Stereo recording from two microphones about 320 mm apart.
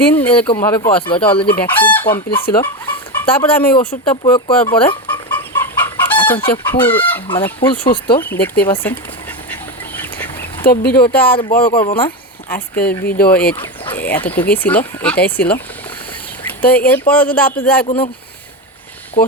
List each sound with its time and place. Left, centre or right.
0.1 s speech: centre
4.8 s chicken: centre
6.5 s speech: centre
9.9 s duck: centre
10.7 s speech: left
11.3 s speech: centre
12.8 s speech: left
13.1 s speech: centre
13.6 s a sound: centre
14.3 s speech: centre